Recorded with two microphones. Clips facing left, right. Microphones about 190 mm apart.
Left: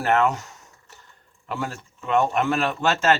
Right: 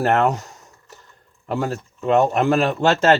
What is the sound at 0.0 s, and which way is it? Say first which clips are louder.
Speech: right 3 dB; 35° right (ahead or behind).